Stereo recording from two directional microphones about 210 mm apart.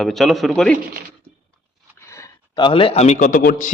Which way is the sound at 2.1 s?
15° left (ahead or behind).